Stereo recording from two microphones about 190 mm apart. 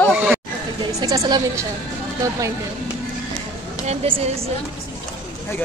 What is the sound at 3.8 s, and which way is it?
Speech, 35° right (ahead or behind).